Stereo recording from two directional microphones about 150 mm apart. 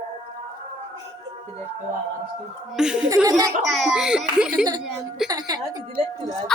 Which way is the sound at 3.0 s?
25° right (ahead or behind).